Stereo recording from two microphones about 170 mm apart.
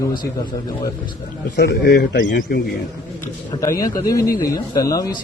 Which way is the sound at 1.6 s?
75° left (ahead or behind).